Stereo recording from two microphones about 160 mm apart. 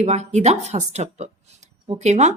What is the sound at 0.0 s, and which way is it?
A woman's voice, 45° right (ahead or behind).